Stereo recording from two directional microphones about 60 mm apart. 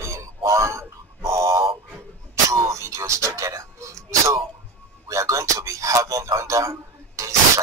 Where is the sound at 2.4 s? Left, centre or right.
Right.